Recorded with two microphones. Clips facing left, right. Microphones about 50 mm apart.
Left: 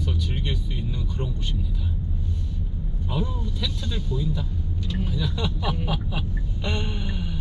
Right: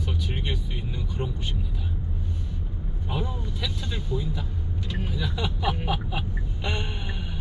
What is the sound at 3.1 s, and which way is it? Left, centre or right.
Speech, centre.